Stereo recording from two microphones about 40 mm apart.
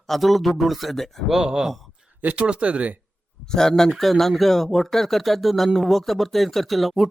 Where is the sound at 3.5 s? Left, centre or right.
Centre.